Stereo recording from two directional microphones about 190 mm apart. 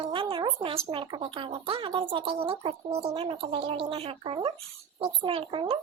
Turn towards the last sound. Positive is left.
turn(degrees=-30)  # may be behind; listen again after turning